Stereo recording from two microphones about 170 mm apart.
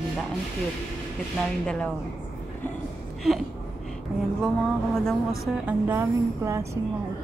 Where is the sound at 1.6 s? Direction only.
5° left (ahead or behind).